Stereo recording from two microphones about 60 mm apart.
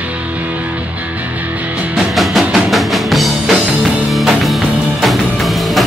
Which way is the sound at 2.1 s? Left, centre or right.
Centre.